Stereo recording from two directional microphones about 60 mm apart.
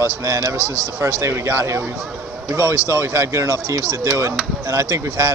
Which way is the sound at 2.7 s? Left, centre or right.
Right.